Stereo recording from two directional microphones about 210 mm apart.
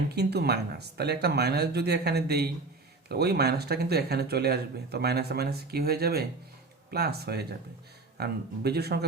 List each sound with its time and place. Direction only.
0.1 s speech: 50° right (ahead or behind)